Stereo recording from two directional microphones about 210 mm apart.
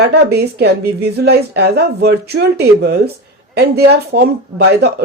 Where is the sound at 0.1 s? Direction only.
50° right (ahead or behind).